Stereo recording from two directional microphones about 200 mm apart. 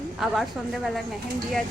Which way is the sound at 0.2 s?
Centre (ahead or behind).